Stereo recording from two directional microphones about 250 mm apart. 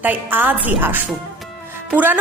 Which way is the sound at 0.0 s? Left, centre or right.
Centre.